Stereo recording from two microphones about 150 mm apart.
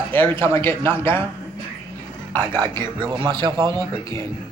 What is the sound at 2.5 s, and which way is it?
A man's voice, 30° right (ahead or behind).